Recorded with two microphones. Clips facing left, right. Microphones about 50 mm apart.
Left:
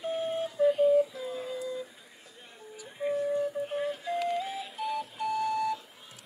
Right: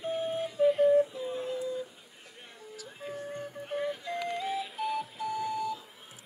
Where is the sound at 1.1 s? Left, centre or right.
Right.